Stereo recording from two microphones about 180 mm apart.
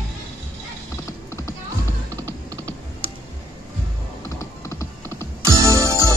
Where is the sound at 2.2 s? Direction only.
20° right (ahead or behind).